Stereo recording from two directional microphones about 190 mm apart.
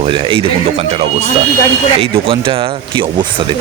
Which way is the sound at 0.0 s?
25° right (ahead or behind).